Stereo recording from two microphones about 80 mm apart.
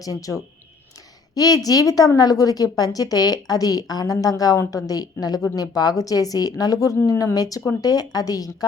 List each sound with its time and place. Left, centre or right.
0.0 s a woman's voice: left